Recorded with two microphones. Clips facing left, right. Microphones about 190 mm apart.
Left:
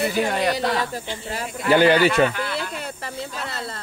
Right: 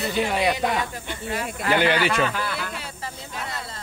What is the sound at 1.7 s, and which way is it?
Speech, 40° left (ahead or behind).